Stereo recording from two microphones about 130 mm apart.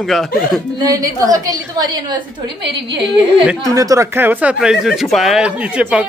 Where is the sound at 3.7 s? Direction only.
25° right (ahead or behind).